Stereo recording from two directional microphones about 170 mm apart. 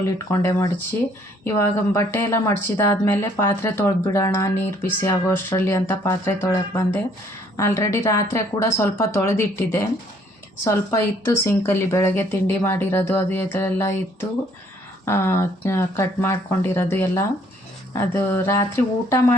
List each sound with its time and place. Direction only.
0.3 s a woman's voice: 20° left (ahead or behind)
11.3 s a woman's voice: 15° left (ahead or behind)